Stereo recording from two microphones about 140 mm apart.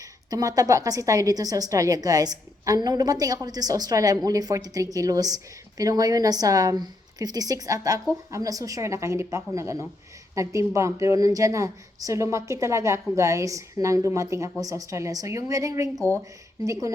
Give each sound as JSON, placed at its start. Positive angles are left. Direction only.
{"t": 0.0, "sound": "a woman's voice", "side_deg": -25}